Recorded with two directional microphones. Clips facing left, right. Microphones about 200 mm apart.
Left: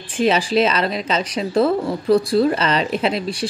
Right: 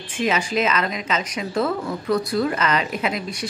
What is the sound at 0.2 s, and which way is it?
A woman's voice, 30° left (ahead or behind).